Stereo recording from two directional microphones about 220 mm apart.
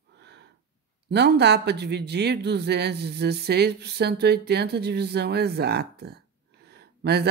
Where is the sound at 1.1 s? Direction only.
50° right (ahead or behind).